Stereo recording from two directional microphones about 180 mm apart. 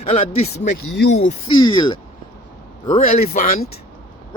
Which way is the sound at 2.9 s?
50° left (ahead or behind).